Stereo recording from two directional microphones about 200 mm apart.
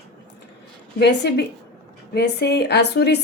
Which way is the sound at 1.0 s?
55° left (ahead or behind).